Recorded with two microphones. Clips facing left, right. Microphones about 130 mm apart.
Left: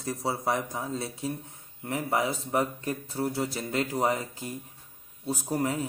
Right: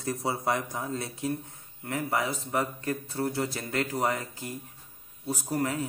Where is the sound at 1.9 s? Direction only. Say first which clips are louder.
Left 1 dB; 20° left (ahead or behind).